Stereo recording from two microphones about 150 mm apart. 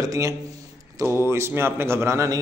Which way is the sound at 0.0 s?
20° right (ahead or behind).